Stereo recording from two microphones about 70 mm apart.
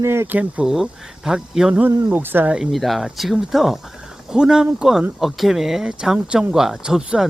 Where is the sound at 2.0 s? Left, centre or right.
Right.